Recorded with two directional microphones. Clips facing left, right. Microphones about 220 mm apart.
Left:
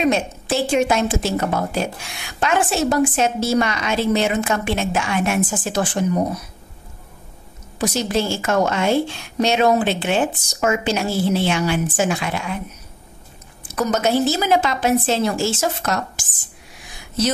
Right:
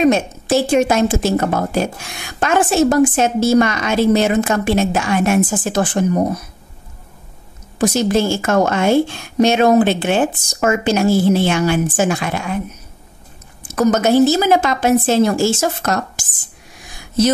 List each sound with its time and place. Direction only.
0.0 s a woman's voice: 45° right (ahead or behind)
7.8 s a woman's voice: 50° right (ahead or behind)
13.7 s a woman's voice: 50° right (ahead or behind)